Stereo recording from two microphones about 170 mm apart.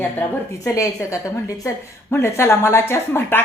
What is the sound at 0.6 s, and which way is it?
A woman's voice, 15° left (ahead or behind).